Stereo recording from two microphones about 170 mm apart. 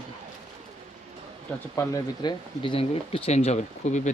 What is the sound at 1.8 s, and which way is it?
Speech, 25° left (ahead or behind).